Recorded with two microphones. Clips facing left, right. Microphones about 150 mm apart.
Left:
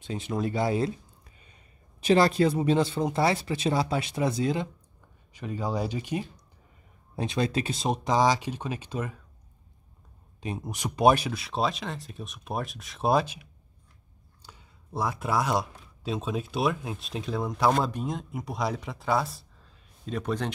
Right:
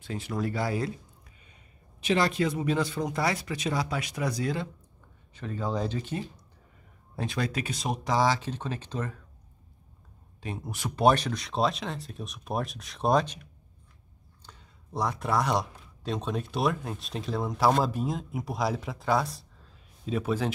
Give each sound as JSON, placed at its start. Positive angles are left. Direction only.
{"t": 0.0, "sound": "speech", "side_deg": 20}
{"t": 1.4, "sound": "a man's voice", "side_deg": 35}
{"t": 10.4, "sound": "speech", "side_deg": 20}